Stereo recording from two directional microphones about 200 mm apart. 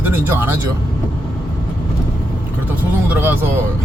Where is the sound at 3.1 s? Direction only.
10° right (ahead or behind).